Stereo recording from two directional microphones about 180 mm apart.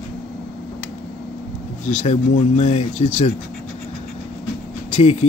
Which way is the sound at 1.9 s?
40° left (ahead or behind).